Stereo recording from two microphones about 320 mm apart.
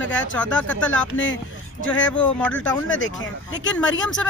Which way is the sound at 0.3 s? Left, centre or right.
Centre.